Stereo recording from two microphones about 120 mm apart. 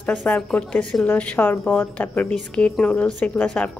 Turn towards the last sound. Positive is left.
turn(degrees=15)  # may be behind; listen again after turning